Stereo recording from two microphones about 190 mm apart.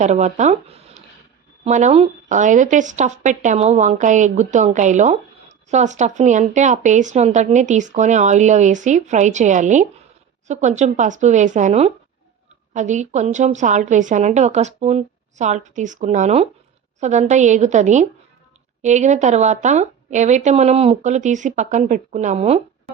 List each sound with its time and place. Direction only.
0.0 s speech: 35° right (ahead or behind)